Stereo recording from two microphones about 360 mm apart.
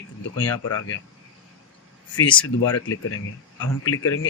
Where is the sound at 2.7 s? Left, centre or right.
Left.